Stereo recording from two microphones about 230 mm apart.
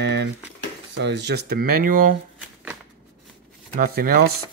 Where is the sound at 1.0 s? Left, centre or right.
Right.